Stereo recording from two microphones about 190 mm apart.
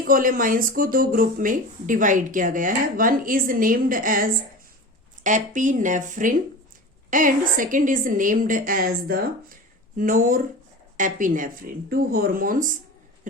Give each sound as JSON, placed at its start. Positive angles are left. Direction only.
{"t": 0.1, "sound": "a woman's voice", "side_deg": -45}